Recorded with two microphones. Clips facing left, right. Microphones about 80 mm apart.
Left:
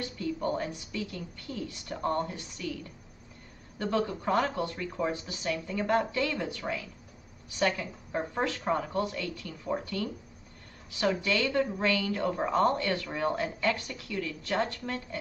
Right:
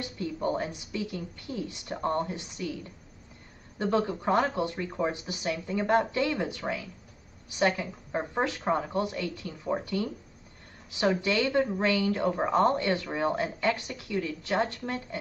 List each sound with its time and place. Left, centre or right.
0.0 s a woman's voice: right